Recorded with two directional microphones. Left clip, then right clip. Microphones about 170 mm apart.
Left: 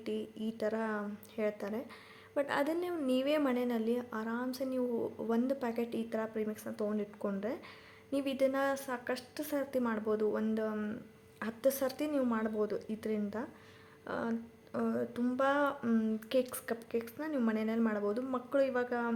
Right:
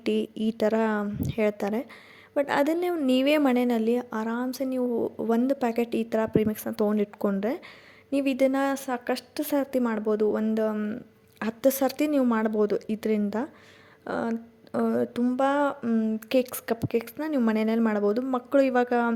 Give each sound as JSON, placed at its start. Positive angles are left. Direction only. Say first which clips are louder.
{"t": 0.0, "sound": "a woman's voice", "louder": "right 12 dB", "side_deg": -55}
{"t": 3.1, "sound": "a woman's voice", "louder": "right 9 dB", "side_deg": -50}
{"t": 15.8, "sound": "speech", "louder": "right 6 dB", "side_deg": -30}
{"t": 16.3, "sound": "a woman's voice", "louder": "right 8 dB", "side_deg": -45}